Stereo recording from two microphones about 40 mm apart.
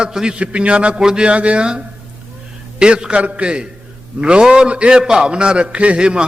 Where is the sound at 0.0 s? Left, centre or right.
Centre.